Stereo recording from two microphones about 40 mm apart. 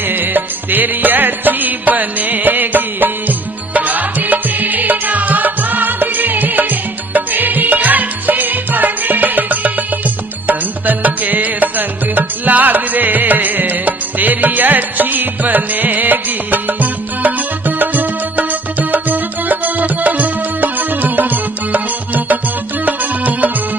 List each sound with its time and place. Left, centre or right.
0.1 s music: right